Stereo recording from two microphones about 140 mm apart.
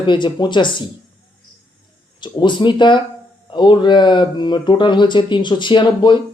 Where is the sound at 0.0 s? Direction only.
35° left (ahead or behind).